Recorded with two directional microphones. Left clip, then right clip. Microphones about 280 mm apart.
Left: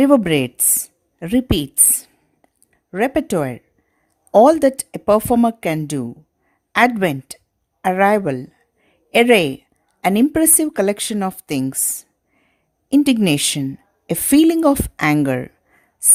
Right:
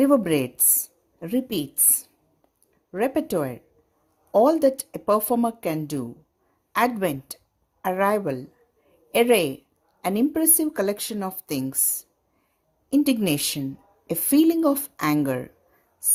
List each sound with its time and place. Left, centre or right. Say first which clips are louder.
0.0 s speech: left 6 dB; left
2.9 s speech: left 5 dB; left
13.2 s speech: left 7 dB; left